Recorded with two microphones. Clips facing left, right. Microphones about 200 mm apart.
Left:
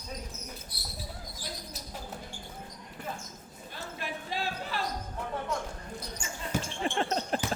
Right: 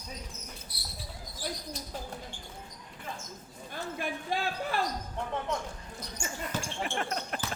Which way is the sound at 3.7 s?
50° right (ahead or behind).